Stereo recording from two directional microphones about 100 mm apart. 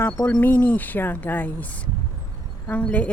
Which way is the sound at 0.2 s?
15° left (ahead or behind).